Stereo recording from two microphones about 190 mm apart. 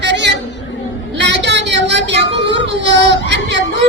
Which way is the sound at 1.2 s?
65° right (ahead or behind).